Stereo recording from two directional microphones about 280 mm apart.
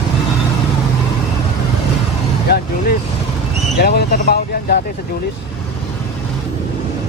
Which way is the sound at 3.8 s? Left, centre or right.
Left.